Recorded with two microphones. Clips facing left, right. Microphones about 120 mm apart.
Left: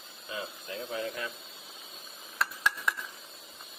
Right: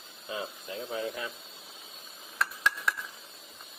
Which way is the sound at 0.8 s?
15° right (ahead or behind).